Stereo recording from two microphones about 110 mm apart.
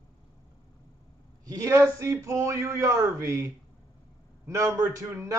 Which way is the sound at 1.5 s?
25° right (ahead or behind).